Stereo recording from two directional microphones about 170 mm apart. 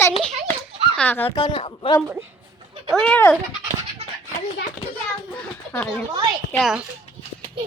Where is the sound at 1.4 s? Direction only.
30° left (ahead or behind).